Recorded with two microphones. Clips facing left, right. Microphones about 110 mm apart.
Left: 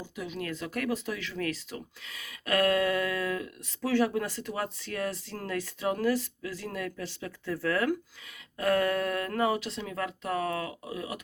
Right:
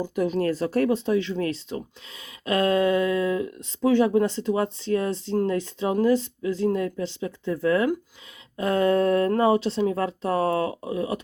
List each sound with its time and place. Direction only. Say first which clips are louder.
0.0 s speech: right 13 dB; 45° right (ahead or behind)